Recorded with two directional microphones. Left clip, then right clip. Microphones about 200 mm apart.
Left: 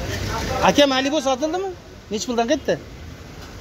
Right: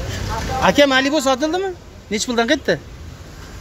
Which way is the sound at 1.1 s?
25° right (ahead or behind).